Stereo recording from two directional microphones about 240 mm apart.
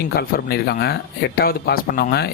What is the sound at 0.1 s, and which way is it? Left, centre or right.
Speech, left.